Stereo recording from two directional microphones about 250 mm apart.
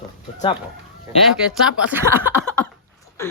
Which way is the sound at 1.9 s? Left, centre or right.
Centre.